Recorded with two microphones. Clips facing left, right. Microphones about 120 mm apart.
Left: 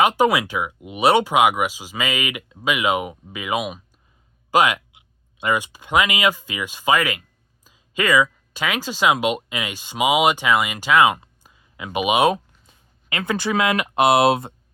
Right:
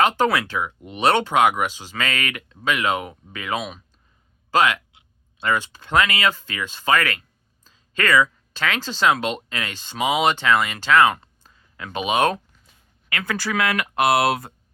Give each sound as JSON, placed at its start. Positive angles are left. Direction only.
{"t": 0.0, "sound": "speech", "side_deg": 10}
{"t": 13.1, "sound": "speech", "side_deg": 20}